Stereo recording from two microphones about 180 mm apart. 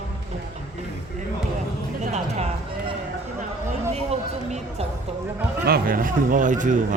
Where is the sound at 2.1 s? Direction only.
35° right (ahead or behind).